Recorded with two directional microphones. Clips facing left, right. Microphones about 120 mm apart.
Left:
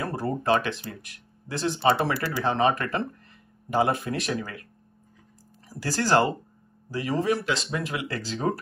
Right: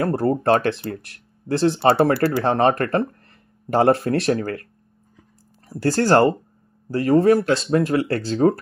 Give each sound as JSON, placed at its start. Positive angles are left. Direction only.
{"t": 0.0, "sound": "speech", "side_deg": -55}